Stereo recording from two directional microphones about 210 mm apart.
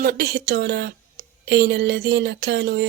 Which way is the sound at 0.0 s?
45° right (ahead or behind).